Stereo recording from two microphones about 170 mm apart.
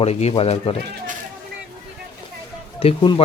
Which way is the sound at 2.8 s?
30° left (ahead or behind).